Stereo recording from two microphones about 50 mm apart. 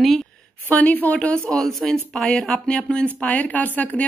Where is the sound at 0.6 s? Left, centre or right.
Left.